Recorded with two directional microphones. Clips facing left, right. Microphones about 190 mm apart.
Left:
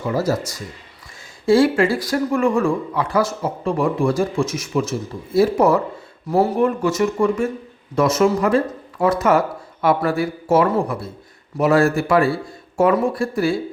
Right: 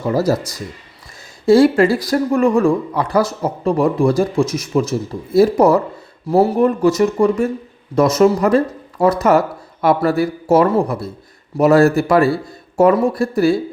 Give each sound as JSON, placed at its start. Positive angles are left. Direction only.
{"t": 0.1, "sound": "speech", "side_deg": -35}